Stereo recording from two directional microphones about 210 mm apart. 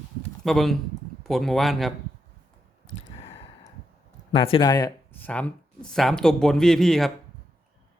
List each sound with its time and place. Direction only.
0.4 s speech: centre (ahead or behind)
2.9 s a sound: 20° left (ahead or behind)
4.3 s speech: 25° left (ahead or behind); by 7.1 s centre (ahead or behind)